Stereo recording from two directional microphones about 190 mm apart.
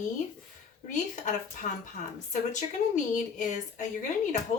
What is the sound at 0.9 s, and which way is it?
Speech, 40° left (ahead or behind).